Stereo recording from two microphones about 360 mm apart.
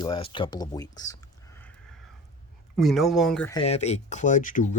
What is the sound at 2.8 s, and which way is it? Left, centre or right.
Speech, centre.